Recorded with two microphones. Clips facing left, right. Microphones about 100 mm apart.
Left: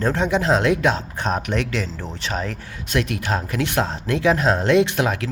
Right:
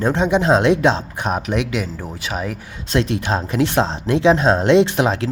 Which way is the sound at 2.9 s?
25° right (ahead or behind).